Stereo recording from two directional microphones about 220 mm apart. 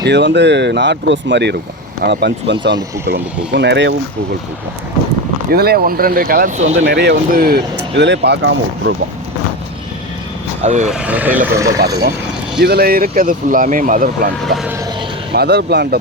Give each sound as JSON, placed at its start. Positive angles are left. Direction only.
{"t": 0.0, "sound": "speech", "side_deg": -50}
{"t": 5.5, "sound": "speech", "side_deg": -45}
{"t": 6.7, "sound": "speech", "side_deg": -50}
{"t": 10.6, "sound": "speech", "side_deg": -30}
{"t": 10.8, "sound": "speech", "side_deg": -5}
{"t": 12.6, "sound": "speech", "side_deg": -45}
{"t": 14.4, "sound": "speech", "side_deg": 0}
{"t": 15.3, "sound": "speech", "side_deg": -50}